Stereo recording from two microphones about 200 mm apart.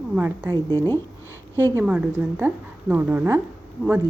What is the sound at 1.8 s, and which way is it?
A woman's voice, 10° right (ahead or behind).